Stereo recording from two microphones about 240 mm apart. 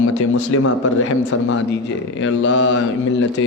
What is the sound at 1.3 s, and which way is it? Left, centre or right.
Speech, left.